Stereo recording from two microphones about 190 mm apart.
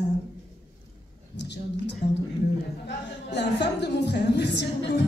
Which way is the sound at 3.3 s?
60° left (ahead or behind).